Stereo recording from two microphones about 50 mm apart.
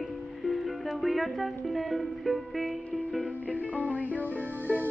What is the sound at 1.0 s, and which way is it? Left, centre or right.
Speech, centre.